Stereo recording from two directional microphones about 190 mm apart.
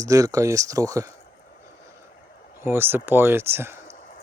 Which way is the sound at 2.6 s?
10° right (ahead or behind).